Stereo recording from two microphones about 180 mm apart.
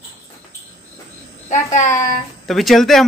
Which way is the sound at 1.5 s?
40° left (ahead or behind).